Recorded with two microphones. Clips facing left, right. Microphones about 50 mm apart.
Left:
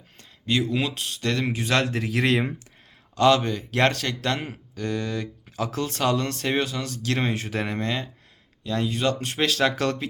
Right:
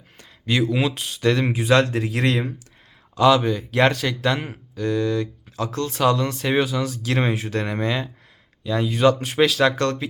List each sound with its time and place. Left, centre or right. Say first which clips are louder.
0.2 s a sound: right 3 dB; right
0.7 s speech: right 4 dB; centre
1.9 s a man's voice: right 1 dB; centre
7.5 s a man's voice: right 3 dB; centre
7.8 s speech: right 4 dB; centre
8.9 s speech: right 7 dB; right
9.6 s a man's voice: right 3 dB; centre